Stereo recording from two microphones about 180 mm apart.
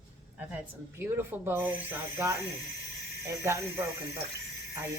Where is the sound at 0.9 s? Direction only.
10° right (ahead or behind).